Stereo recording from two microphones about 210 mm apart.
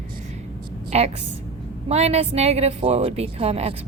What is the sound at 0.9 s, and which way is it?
A woman's voice, 30° right (ahead or behind).